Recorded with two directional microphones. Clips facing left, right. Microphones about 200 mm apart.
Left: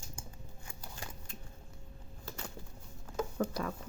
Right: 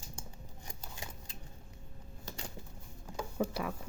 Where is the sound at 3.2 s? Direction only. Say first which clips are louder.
Left 1 dB; 10° right (ahead or behind).